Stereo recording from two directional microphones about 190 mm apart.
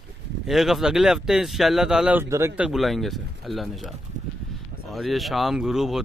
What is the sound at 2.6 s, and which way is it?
Speech, centre (ahead or behind).